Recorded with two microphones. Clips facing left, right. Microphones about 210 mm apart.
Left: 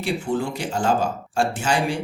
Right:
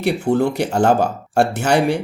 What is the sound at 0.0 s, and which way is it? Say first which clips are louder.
Speech: right 7 dB; 65° right (ahead or behind).